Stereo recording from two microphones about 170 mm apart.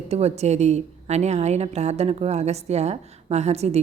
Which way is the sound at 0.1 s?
40° right (ahead or behind).